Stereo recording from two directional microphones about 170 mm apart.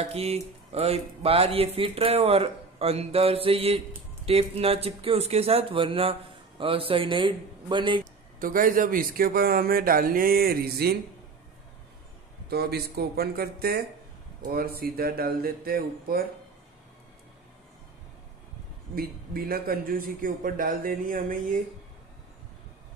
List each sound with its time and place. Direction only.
0.0 s a man's voice: 35° right (ahead or behind)
8.0 s speech: 55° right (ahead or behind)
12.4 s speech: 70° right (ahead or behind)
18.9 s speech: 60° right (ahead or behind)